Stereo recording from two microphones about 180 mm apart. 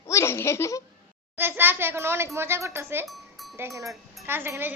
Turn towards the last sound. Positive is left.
turn(degrees=-10)  # may be behind; listen again after turning